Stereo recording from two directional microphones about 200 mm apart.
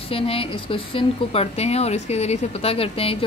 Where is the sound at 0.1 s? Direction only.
30° left (ahead or behind).